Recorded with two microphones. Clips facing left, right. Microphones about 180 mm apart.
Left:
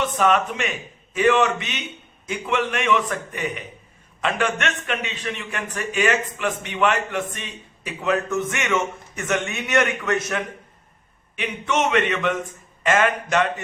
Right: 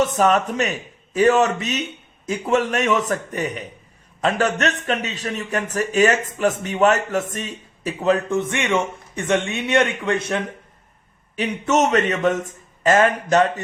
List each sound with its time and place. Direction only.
0.0 s a man's voice: 40° right (ahead or behind)